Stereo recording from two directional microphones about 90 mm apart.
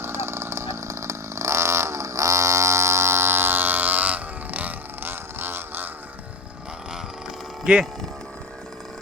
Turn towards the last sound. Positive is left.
turn(degrees=-10)  # may be behind; listen again after turning